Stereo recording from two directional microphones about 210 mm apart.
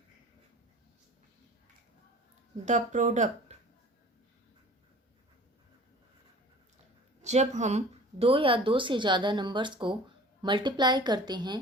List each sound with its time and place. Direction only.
2.6 s speech: 35° right (ahead or behind)
7.2 s speech: 35° right (ahead or behind)